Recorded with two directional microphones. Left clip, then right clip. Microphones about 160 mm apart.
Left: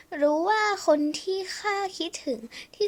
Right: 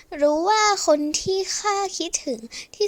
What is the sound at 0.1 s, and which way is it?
A child's voice, 40° right (ahead or behind).